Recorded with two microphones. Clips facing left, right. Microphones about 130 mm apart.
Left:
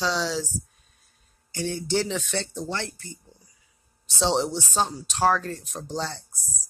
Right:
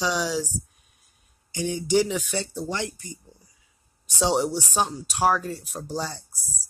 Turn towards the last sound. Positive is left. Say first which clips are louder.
# even
turn(degrees=-10)  # may be behind; listen again after turning